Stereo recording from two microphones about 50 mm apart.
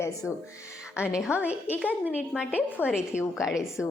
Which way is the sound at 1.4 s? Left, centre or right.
Right.